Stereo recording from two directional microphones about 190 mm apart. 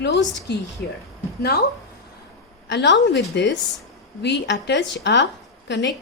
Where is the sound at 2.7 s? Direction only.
70° left (ahead or behind).